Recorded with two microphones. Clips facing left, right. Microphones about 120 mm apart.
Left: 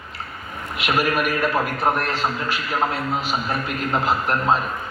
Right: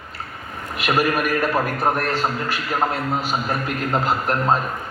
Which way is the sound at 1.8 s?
45° right (ahead or behind).